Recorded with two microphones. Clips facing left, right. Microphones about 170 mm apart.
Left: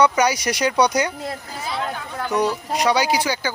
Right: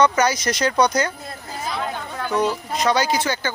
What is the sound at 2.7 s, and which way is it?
Speech, 15° left (ahead or behind).